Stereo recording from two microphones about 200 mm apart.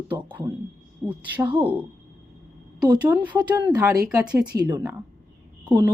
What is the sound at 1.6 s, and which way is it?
Speech, 10° right (ahead or behind).